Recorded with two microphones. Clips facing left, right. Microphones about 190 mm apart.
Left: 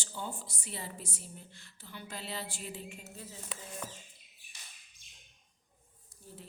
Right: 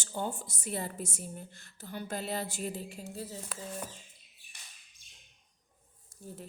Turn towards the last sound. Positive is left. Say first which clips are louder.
# right 6 dB
turn(degrees=-45)  # may be behind; listen again after turning